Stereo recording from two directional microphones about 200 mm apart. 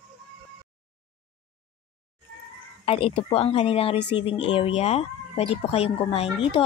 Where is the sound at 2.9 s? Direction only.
25° left (ahead or behind).